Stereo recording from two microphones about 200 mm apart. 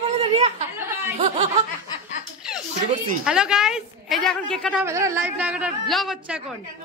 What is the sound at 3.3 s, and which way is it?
A woman's voice, 5° right (ahead or behind).